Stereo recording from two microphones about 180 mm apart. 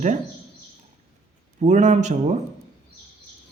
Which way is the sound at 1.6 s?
40° right (ahead or behind).